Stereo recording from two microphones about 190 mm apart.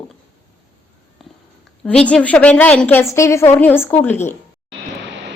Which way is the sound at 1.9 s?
5° left (ahead or behind).